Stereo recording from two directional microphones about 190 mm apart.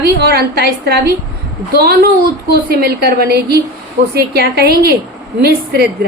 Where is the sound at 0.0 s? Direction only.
55° right (ahead or behind).